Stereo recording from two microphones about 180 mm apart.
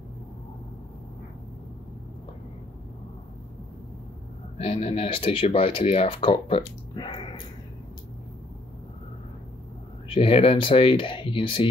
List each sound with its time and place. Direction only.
4.6 s speech: 35° left (ahead or behind)
10.1 s speech: 30° left (ahead or behind)